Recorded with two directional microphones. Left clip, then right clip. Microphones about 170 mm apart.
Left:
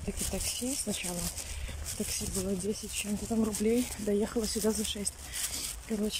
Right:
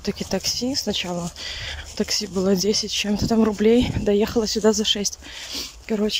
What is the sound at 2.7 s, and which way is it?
Speech, 30° right (ahead or behind).